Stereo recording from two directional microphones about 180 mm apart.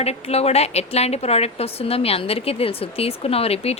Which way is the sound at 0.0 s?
35° left (ahead or behind).